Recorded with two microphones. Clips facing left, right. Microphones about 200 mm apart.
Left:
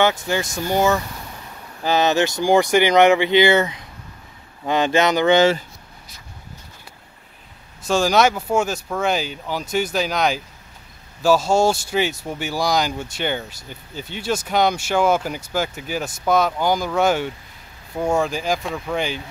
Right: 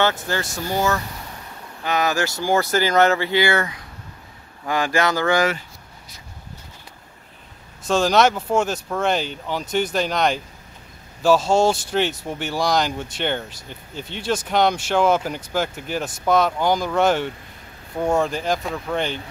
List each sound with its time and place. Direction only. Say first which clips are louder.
0.0 s speech: left 2 dB; 15° left (ahead or behind)
7.9 s speech: even; 10° left (ahead or behind)